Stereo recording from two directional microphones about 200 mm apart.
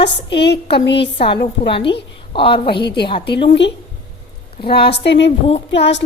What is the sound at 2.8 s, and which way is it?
Speech, 55° left (ahead or behind).